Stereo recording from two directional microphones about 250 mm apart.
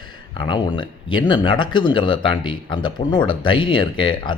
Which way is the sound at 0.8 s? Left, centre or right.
Centre.